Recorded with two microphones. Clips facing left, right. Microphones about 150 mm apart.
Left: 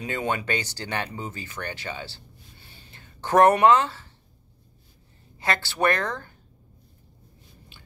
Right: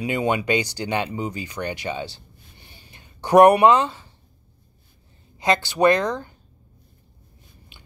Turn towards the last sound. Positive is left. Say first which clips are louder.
# right 6 dB
turn(degrees=-15)  # may be behind; listen again after turning